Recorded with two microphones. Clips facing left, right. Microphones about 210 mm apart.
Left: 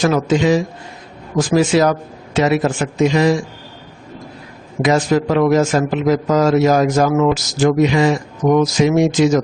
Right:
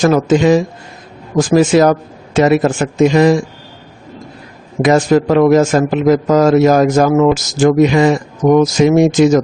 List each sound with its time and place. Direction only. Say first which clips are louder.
0.0 s a man's voice: right 4 dB; 45° right (ahead or behind)
4.8 s a man's voice: right 4 dB; 50° right (ahead or behind)